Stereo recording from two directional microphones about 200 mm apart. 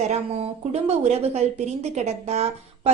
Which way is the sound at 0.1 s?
30° right (ahead or behind).